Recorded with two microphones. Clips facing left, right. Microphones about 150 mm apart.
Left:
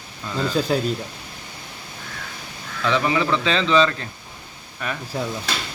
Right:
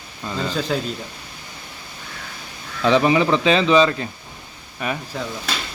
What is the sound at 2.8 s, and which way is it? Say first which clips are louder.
A man's voice: right 5 dB; 20° right (ahead or behind).